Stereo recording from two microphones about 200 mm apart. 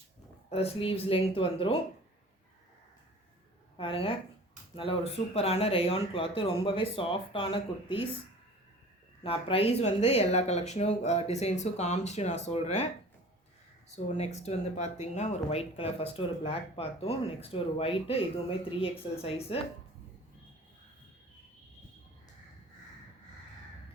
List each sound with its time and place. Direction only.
0.5 s speech: 30° left (ahead or behind)
3.8 s speech: 25° left (ahead or behind)
9.2 s speech: 25° left (ahead or behind)
13.9 s speech: 30° left (ahead or behind)